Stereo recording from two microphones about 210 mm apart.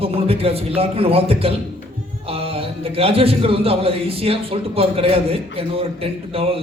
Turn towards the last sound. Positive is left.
turn(degrees=-25)  # may be behind; listen again after turning